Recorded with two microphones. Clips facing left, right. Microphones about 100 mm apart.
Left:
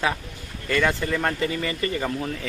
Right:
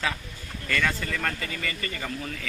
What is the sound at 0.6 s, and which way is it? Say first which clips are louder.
Speech: left 5 dB; 20° left (ahead or behind).